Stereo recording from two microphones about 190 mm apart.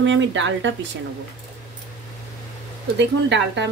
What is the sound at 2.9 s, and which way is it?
Speech, 65° right (ahead or behind).